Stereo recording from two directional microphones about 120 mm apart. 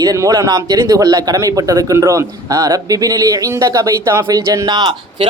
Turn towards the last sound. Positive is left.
turn(degrees=-40)  # may be behind; listen again after turning